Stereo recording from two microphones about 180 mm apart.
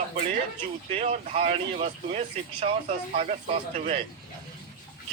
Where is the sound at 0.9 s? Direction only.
35° right (ahead or behind).